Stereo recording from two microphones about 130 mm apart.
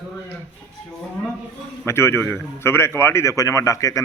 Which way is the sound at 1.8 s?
20° left (ahead or behind).